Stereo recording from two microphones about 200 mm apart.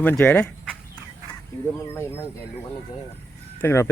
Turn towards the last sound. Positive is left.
turn(degrees=15)  # may be behind; listen again after turning